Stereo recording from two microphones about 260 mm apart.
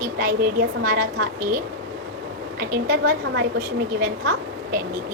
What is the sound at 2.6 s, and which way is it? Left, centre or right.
A woman's voice, right.